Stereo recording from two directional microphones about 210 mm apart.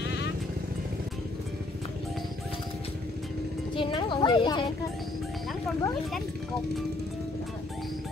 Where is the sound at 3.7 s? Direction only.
25° left (ahead or behind).